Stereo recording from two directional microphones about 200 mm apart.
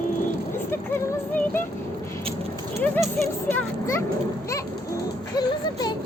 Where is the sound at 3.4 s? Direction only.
10° left (ahead or behind).